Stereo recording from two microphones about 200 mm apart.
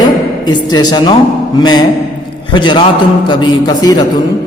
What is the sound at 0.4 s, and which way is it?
A man's voice, 20° left (ahead or behind).